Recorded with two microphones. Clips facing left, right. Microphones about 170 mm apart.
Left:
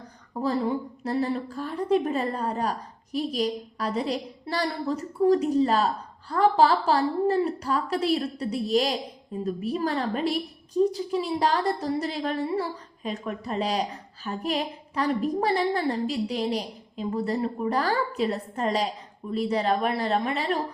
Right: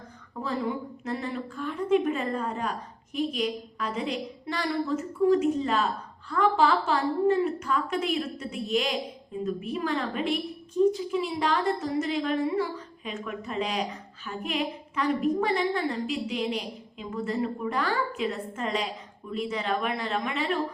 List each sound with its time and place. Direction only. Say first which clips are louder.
0.3 s a woman's voice: left 4 dB; 35° left (ahead or behind)